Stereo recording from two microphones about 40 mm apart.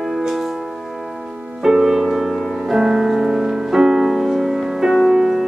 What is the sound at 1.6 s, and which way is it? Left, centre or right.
Music, centre.